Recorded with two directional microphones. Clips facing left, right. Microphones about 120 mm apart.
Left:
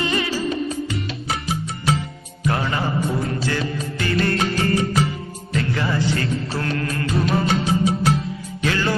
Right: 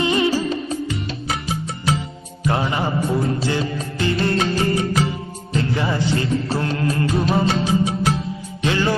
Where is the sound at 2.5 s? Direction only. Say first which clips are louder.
Right 2 dB; 20° right (ahead or behind).